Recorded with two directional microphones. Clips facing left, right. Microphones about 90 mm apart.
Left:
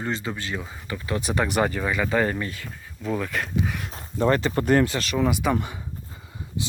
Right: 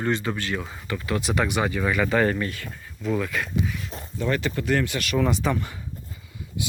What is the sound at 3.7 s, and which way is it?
Speech, 60° left (ahead or behind).